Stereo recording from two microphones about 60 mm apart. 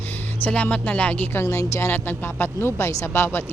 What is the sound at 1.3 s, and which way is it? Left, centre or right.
Speech, left.